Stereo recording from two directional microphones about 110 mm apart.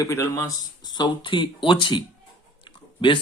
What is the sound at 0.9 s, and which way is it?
Speech, 40° left (ahead or behind).